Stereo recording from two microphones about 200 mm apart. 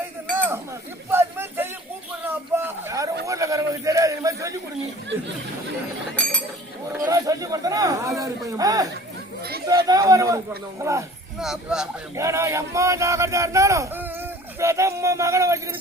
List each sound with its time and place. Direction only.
0.3 s chink: 10° right (ahead or behind)
1.1 s a sound: 10° right (ahead or behind)
6.2 s chink: 5° left (ahead or behind)
7.1 s a sound: 15° right (ahead or behind)
8.5 s chatter: 20° right (ahead or behind)
9.4 s chatter: 50° right (ahead or behind)
9.6 s a sound: 20° right (ahead or behind)
10.8 s speech: 15° right (ahead or behind)
11.3 s speech: centre (ahead or behind)
12.1 s speech: 15° right (ahead or behind)